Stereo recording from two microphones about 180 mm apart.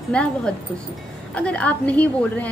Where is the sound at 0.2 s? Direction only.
5° left (ahead or behind).